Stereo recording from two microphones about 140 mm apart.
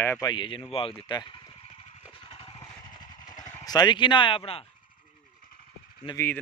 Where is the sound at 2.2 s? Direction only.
35° left (ahead or behind).